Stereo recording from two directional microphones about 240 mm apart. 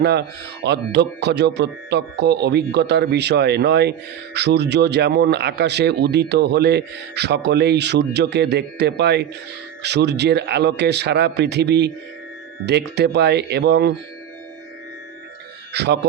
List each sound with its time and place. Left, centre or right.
0.0 s a man's voice: right
15.7 s speech: right